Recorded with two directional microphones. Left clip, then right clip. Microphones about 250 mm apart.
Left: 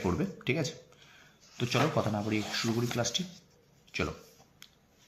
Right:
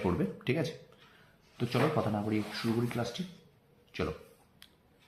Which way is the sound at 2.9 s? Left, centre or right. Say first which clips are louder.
Left 5 dB; centre.